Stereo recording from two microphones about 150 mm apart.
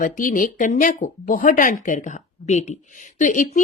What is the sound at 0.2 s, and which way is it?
Speech, 65° left (ahead or behind).